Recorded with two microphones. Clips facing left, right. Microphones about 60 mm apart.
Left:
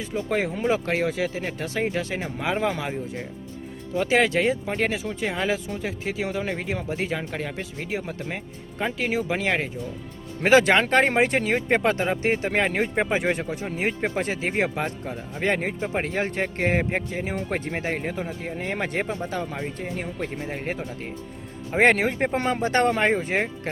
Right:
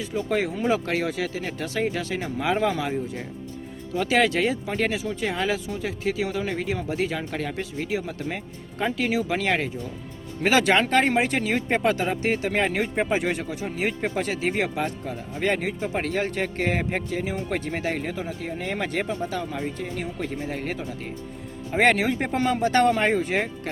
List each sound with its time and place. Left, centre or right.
0.1 s speech: centre
3.9 s speech: left
7.3 s speech: centre
7.6 s speech: left
10.4 s speech: left
12.1 s speech: left
12.5 s speech: left
16.0 s speech: left
17.2 s speech: left
17.7 s speech: left
19.5 s speech: left
22.0 s speech: left